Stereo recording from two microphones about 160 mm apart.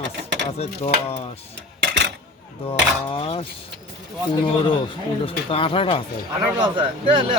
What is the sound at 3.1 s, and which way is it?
Speech, 35° left (ahead or behind).